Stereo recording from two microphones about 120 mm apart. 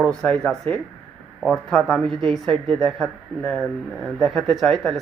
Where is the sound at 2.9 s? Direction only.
5° left (ahead or behind).